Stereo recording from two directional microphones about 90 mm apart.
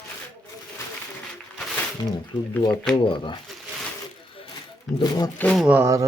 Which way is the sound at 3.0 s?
65° left (ahead or behind).